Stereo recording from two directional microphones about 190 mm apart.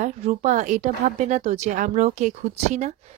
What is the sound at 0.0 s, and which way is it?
Speech, 35° right (ahead or behind).